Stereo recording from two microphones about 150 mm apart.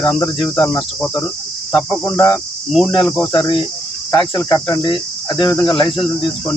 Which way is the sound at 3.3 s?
30° left (ahead or behind).